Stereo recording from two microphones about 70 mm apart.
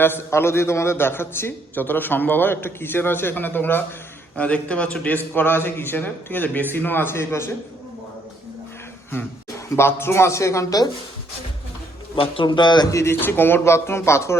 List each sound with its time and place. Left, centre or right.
0.0 s a man's voice: left
4.4 s a man's voice: centre; by 7.5 s left
9.7 s speech: left
12.5 s a man's voice: left
12.9 s speech: left
13.1 s a man's voice: left